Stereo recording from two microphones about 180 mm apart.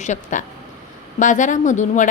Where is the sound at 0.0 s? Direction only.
45° left (ahead or behind).